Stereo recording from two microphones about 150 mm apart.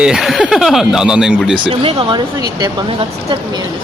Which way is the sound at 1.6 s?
35° right (ahead or behind).